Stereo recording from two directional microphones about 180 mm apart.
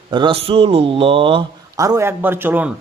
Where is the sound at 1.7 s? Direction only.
20° right (ahead or behind).